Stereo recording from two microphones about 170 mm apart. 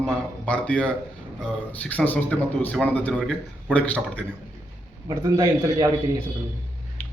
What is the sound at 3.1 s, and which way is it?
Speech, 5° right (ahead or behind).